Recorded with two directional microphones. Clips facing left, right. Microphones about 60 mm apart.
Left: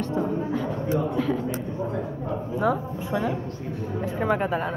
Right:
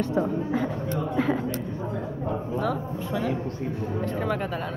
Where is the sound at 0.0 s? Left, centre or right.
Centre.